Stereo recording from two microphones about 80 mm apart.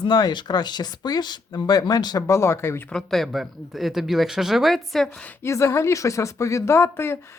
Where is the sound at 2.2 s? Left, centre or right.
Left.